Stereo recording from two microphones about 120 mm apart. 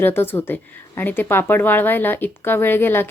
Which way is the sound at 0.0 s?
20° left (ahead or behind).